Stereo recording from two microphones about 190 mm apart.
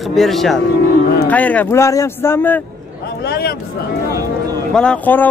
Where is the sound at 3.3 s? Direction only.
55° left (ahead or behind).